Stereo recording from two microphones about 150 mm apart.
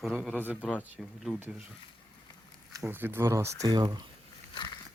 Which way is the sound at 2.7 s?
15° right (ahead or behind).